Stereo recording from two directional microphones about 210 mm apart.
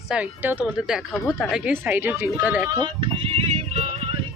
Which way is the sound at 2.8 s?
25° right (ahead or behind).